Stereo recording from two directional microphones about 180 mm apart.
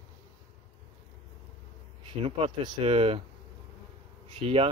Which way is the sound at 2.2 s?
30° right (ahead or behind).